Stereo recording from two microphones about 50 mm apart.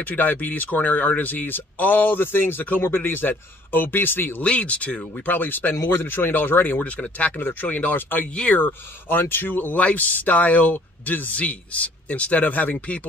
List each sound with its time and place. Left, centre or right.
0.0 s a man's voice: left
4.4 s speech: left
5.8 s a man's voice: left
6.8 s speech: left
9.2 s a man's voice: left
9.8 s speech: left
11.3 s speech: left